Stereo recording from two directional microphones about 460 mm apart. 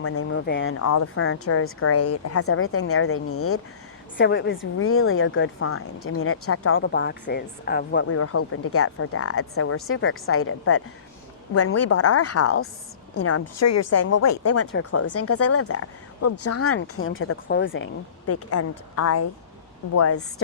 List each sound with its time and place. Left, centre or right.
0.0 s a woman's voice: left